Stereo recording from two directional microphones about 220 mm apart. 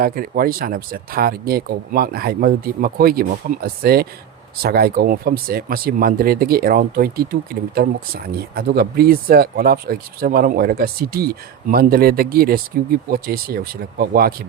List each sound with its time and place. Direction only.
0.0 s speech: 40° right (ahead or behind)